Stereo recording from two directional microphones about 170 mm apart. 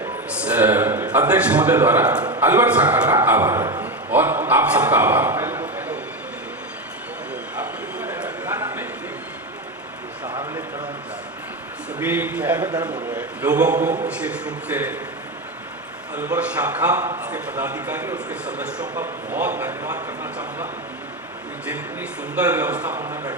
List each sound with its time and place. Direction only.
0.3 s a man's voice: 5° right (ahead or behind)
7.5 s a sound: 10° right (ahead or behind)
10.2 s a sound: 25° right (ahead or behind)
11.9 s a man's voice: 10° right (ahead or behind)
12.6 s a man's voice: 25° right (ahead or behind)
13.1 s a sound: 10° right (ahead or behind)
14.1 s a man's voice: 5° right (ahead or behind)
16.1 s a man's voice: 10° right (ahead or behind)
22.4 s a man's voice: 10° right (ahead or behind)